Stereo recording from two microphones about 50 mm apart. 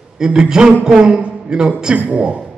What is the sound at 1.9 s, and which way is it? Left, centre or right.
Speech, right.